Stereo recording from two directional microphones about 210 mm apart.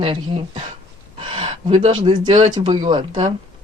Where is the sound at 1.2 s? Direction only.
25° right (ahead or behind).